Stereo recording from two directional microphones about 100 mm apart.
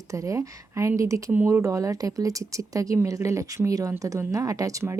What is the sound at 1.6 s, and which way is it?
Speech, 30° right (ahead or behind).